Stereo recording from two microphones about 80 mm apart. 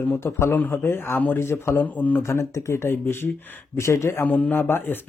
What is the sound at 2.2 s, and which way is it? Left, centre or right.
A man's voice, left.